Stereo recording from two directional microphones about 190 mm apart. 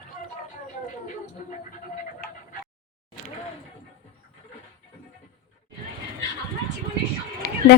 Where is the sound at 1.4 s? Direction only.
45° left (ahead or behind).